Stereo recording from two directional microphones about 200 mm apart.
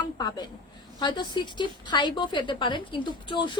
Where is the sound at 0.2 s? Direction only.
20° left (ahead or behind).